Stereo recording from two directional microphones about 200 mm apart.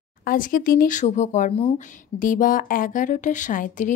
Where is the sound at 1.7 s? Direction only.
40° left (ahead or behind).